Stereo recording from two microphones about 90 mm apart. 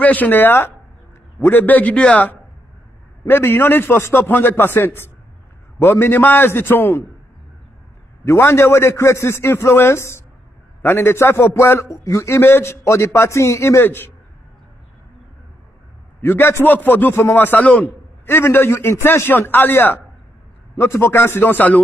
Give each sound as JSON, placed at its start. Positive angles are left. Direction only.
{"t": 0.0, "sound": "a man's voice", "side_deg": 20}
{"t": 3.3, "sound": "a man's voice", "side_deg": 25}
{"t": 8.3, "sound": "a man's voice", "side_deg": 30}
{"t": 16.2, "sound": "a man's voice", "side_deg": 25}